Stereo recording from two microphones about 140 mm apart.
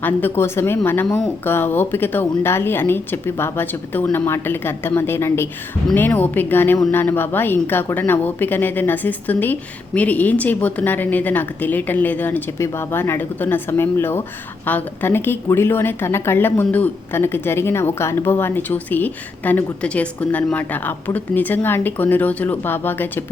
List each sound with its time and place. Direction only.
0.0 s a woman's voice: 15° left (ahead or behind)